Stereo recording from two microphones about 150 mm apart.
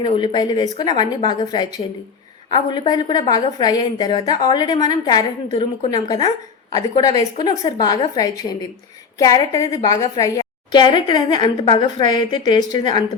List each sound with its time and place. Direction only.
0.3 s a woman's voice: 30° left (ahead or behind)
5.5 s a woman's voice: 40° left (ahead or behind)